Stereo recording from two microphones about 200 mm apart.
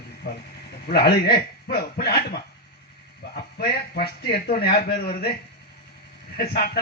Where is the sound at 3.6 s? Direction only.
50° left (ahead or behind).